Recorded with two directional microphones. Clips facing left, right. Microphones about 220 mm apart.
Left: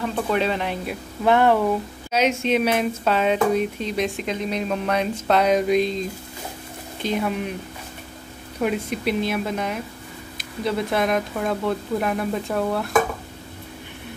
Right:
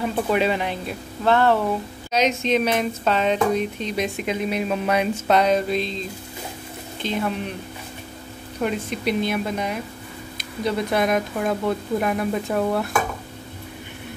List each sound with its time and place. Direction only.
0.3 s speech: 10° right (ahead or behind)
0.7 s speech: 10° left (ahead or behind); by 5.4 s 10° right (ahead or behind)
5.4 s speech: 10° left (ahead or behind)
7.0 s speech: 10° left (ahead or behind)
8.5 s speech: 5° left (ahead or behind)